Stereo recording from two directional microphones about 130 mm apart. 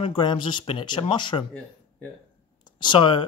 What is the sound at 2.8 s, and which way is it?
Speech, 40° left (ahead or behind).